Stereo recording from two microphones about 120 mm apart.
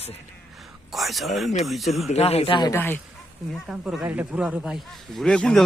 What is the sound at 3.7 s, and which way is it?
A man's voice, 10° right (ahead or behind).